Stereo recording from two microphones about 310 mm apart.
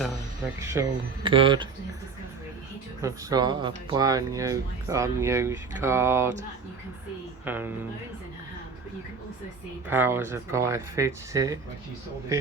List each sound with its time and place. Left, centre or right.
0.6 s speech: centre
3.0 s speech: centre
7.4 s a woman's voice: centre
9.9 s speech: centre